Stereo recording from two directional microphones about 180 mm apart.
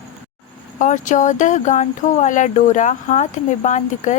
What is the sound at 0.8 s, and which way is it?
Speech, 45° left (ahead or behind).